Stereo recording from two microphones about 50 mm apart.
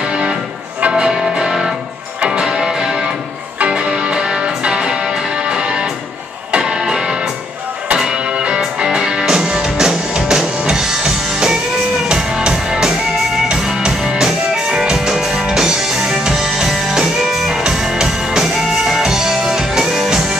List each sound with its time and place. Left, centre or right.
0.8 s music: centre